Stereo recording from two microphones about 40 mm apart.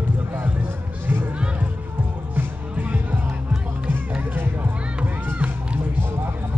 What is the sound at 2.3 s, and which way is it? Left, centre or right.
Music, right.